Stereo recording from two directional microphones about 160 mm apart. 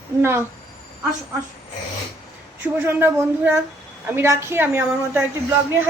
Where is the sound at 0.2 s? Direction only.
15° right (ahead or behind).